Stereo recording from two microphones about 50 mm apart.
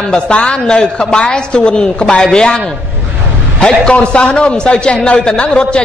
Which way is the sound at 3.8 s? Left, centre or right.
Centre.